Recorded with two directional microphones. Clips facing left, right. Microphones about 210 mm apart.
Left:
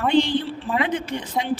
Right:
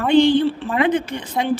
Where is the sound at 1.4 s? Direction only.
55° right (ahead or behind).